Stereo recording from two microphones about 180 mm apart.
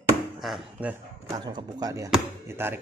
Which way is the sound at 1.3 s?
25° right (ahead or behind).